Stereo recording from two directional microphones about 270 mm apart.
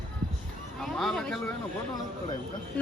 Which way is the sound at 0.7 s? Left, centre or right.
Centre.